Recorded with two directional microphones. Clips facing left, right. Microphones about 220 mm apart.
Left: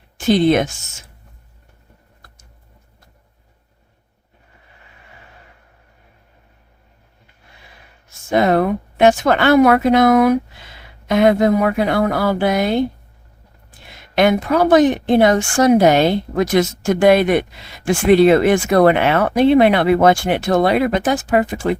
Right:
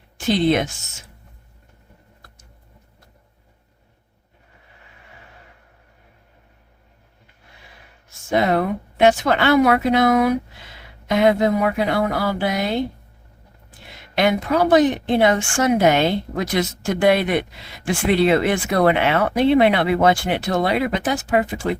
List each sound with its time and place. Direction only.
0.3 s speech: 50° left (ahead or behind)
8.3 s speech: 50° left (ahead or behind)
14.2 s speech: 50° left (ahead or behind)